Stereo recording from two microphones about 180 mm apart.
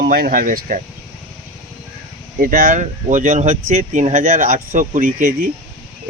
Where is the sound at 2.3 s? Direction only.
50° right (ahead or behind).